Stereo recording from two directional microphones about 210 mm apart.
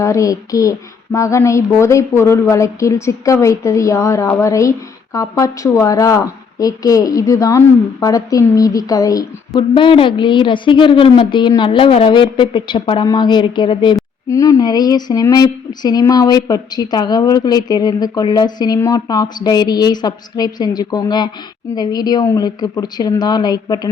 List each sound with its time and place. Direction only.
0.0 s child singing: 15° left (ahead or behind)
8.0 s a woman's voice: 15° left (ahead or behind)